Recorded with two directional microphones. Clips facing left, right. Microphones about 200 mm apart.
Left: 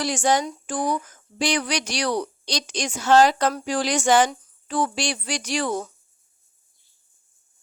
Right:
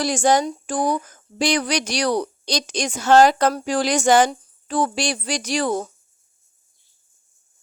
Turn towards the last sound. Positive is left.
turn(degrees=-40)  # may be behind; listen again after turning